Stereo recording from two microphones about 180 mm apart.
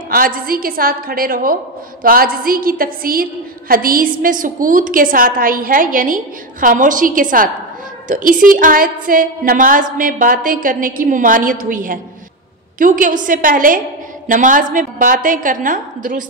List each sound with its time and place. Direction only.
0.1 s a woman's voice: 55° right (ahead or behind)